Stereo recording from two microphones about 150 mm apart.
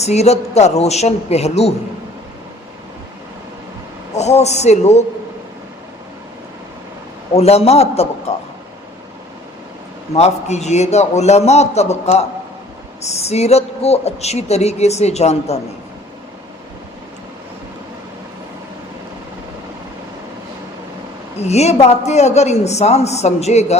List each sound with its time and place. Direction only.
0.0 s speech: 45° left (ahead or behind)
4.1 s speech: 50° left (ahead or behind)
7.3 s speech: 45° left (ahead or behind)
10.2 s speech: 45° left (ahead or behind)
21.3 s speech: 45° left (ahead or behind)